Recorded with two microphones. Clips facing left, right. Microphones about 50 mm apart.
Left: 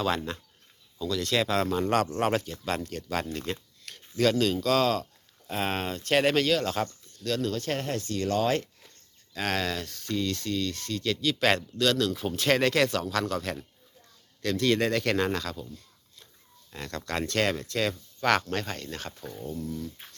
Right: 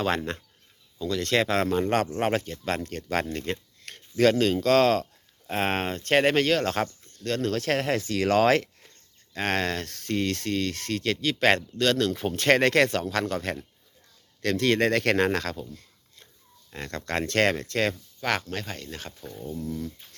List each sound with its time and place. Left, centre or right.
1.0 s speech: right
1.8 s speech: right
2.4 s speech: right
4.6 s speech: right
7.0 s a sound: right
7.5 s speech: right
9.3 s speech: right
12.9 s speech: right
14.4 s speech: right
15.7 s a sound: right
16.7 s speech: right
18.3 s speech: centre
19.1 s speech: centre
19.5 s speech: right